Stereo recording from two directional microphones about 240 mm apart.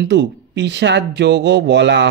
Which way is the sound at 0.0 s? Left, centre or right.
Right.